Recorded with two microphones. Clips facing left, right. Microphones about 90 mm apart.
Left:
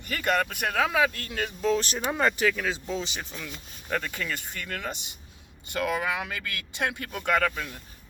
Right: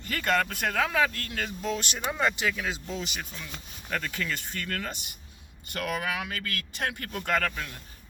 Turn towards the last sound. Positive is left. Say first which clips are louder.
# left 3 dB
turn(degrees=20)  # may be behind; listen again after turning